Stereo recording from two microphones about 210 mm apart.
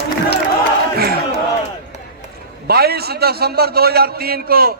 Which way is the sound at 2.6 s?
50° right (ahead or behind).